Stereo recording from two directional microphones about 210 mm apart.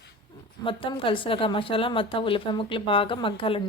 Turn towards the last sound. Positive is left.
turn(degrees=25)  # may be behind; listen again after turning